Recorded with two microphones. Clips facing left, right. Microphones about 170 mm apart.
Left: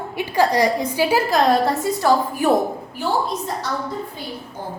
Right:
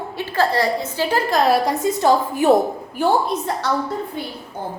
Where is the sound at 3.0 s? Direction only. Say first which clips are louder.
Right 4 dB; 65° right (ahead or behind).